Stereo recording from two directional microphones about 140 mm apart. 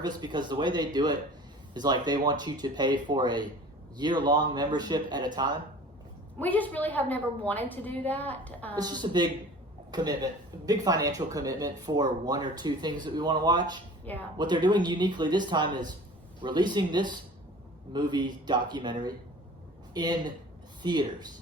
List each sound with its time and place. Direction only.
0.0 s speech: 30° right (ahead or behind)
6.4 s a woman's voice: 10° left (ahead or behind)
8.7 s speech: 30° right (ahead or behind)
14.0 s speech: 10° left (ahead or behind)
14.3 s speech: 30° right (ahead or behind)